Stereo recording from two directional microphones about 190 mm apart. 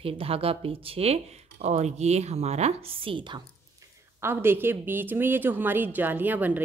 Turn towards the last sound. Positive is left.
turn(degrees=-10)  # may be behind; listen again after turning